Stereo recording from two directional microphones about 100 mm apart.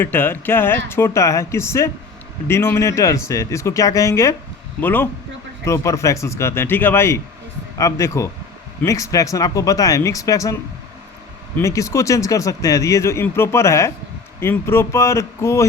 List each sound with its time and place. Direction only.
0.0 s speech: 20° left (ahead or behind)
4.8 s speech: 20° left (ahead or behind)
5.6 s speech: 30° left (ahead or behind)
11.6 s speech: 30° left (ahead or behind)